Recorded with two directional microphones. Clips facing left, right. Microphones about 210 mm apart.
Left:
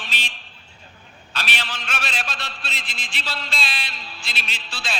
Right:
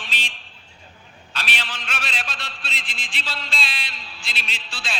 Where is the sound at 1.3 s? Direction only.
45° left (ahead or behind).